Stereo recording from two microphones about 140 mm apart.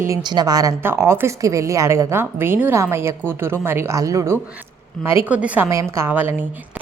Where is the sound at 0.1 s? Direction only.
30° right (ahead or behind).